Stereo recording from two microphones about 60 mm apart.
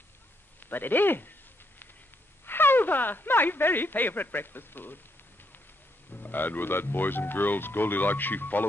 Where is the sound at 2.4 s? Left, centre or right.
Left.